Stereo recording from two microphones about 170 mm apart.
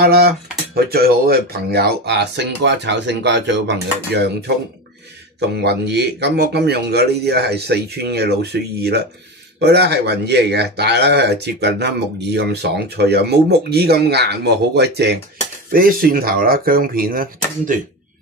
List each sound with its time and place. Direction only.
0.0 s speech: 65° right (ahead or behind)
5.6 s speech: 80° right
15.7 s speech: 55° right (ahead or behind)